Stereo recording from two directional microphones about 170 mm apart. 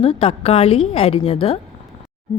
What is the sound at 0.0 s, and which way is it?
A woman's voice, 35° left (ahead or behind).